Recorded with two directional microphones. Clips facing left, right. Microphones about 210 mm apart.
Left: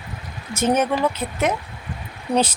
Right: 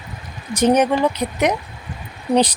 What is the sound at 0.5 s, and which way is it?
Speech, 15° right (ahead or behind).